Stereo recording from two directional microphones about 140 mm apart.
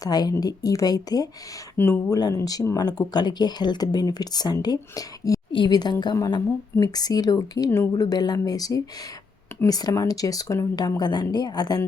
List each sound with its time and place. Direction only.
0.0 s speech: 30° left (ahead or behind)